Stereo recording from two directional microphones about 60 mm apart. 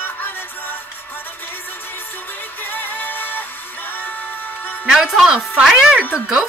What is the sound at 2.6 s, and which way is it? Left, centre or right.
Music, left.